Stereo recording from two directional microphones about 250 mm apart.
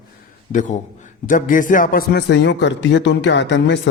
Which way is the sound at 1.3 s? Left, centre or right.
Left.